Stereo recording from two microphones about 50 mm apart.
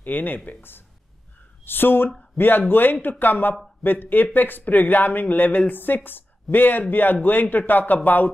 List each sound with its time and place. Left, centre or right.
0.0 s speech: left